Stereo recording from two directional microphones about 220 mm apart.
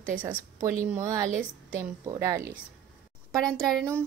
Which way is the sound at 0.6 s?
15° right (ahead or behind).